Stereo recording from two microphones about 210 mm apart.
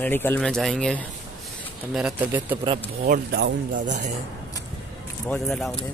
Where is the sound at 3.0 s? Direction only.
50° right (ahead or behind).